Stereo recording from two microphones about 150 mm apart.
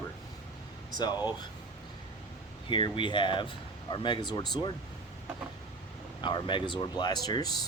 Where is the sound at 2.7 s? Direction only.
35° left (ahead or behind).